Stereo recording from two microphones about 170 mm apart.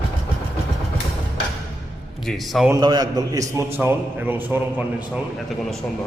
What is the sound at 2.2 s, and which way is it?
Speech, centre (ahead or behind).